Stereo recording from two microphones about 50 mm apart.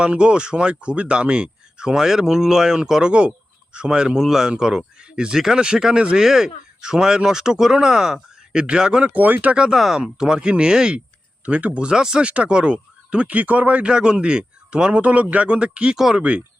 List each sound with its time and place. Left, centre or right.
0.0 s speech: centre
9.1 s speech: right
9.7 s speech: centre
11.4 s speech: right
16.0 s speech: centre